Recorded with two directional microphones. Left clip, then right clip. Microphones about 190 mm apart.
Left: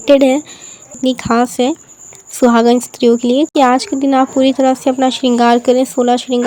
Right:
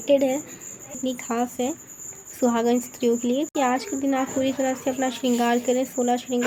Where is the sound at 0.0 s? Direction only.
50° left (ahead or behind).